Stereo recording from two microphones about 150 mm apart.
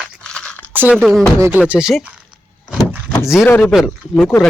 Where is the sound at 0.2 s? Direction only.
5° left (ahead or behind).